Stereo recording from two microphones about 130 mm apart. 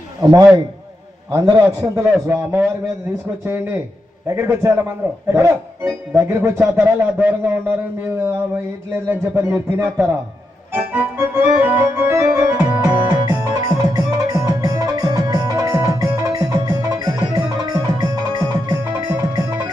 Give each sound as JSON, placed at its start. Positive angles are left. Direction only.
{"t": 0.2, "sound": "a man's voice", "side_deg": -30}
{"t": 3.4, "sound": "music", "side_deg": -20}
{"t": 4.3, "sound": "a man's voice", "side_deg": -20}
{"t": 9.3, "sound": "a man's voice", "side_deg": -20}
{"t": 10.7, "sound": "music", "side_deg": -15}